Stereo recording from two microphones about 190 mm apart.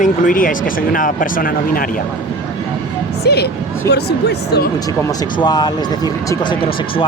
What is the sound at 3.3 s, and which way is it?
Speech, 60° left (ahead or behind).